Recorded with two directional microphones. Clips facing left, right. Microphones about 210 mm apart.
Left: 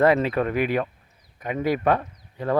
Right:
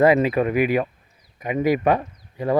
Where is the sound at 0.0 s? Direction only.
10° right (ahead or behind).